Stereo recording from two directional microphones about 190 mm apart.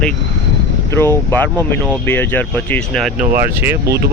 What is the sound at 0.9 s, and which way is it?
Speech, 15° left (ahead or behind).